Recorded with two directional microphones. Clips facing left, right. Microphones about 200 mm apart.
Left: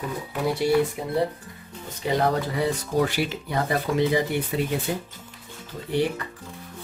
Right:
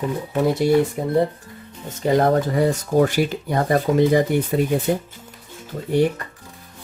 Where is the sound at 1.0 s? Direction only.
45° right (ahead or behind).